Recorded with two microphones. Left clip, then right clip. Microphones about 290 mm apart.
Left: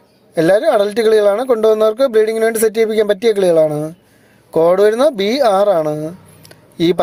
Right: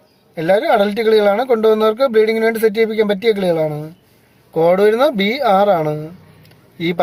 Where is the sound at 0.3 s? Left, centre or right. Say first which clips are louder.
Left 2 dB; left.